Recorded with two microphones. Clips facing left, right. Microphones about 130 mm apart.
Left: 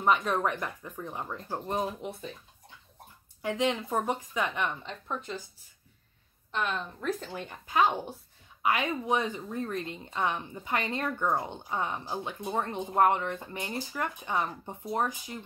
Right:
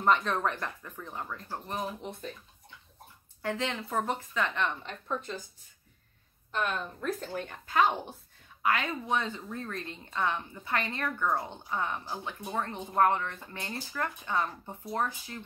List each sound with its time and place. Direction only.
0.0 s speech: 10° left (ahead or behind)
2.0 s speech: 5° left (ahead or behind)
3.4 s speech: 15° left (ahead or behind)
6.6 s speech: 45° right (ahead or behind)
7.4 s speech: 15° left (ahead or behind)